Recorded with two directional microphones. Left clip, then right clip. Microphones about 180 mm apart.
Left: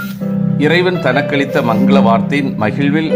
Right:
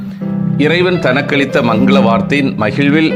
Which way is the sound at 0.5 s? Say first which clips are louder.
Right 1 dB; 15° right (ahead or behind).